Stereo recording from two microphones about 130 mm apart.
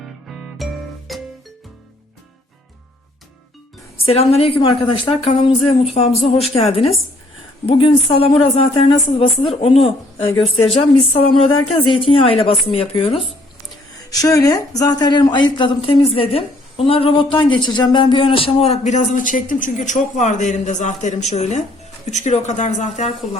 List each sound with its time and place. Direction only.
0.3 s music: centre (ahead or behind)
3.9 s a woman's voice: 50° left (ahead or behind)
13.9 s speech: 30° left (ahead or behind); by 23.4 s 60° left (ahead or behind)